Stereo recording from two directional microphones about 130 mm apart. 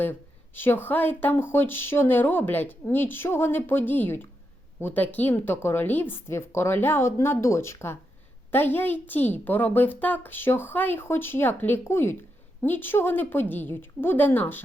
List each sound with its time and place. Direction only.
0.0 s a child's voice: 15° left (ahead or behind)